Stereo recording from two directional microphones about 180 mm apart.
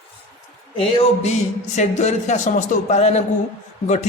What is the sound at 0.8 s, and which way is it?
Speech, 35° left (ahead or behind).